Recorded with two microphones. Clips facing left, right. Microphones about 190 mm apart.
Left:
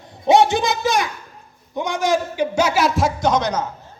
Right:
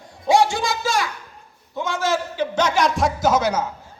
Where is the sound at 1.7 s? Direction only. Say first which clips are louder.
Left 3 dB; 15° left (ahead or behind).